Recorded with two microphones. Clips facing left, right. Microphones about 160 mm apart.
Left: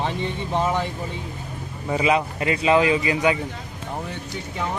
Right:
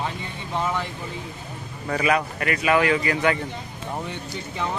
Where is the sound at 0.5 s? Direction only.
20° left (ahead or behind).